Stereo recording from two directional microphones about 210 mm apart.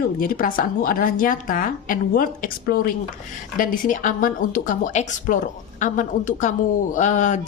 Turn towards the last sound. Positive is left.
turn(degrees=35)  # may be behind; listen again after turning